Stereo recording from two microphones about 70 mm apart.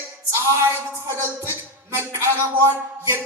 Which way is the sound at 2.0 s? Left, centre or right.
Right.